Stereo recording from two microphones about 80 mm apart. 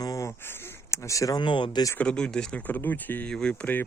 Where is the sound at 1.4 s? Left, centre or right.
Left.